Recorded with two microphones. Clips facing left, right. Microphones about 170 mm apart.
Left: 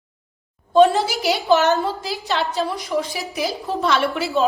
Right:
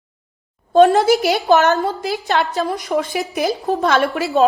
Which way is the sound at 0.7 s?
50° right (ahead or behind).